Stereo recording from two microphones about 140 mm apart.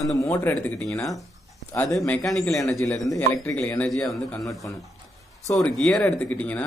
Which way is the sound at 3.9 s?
Centre (ahead or behind).